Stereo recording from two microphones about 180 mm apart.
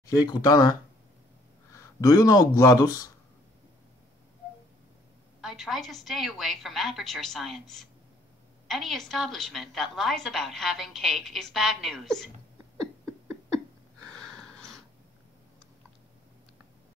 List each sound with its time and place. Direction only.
0.0 s speech: 20° left (ahead or behind)
5.4 s a woman's voice: centre (ahead or behind)
14.0 s a sound: 5° left (ahead or behind)